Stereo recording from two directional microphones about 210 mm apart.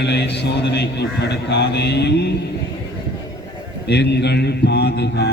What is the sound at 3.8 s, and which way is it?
A man's voice, 50° left (ahead or behind).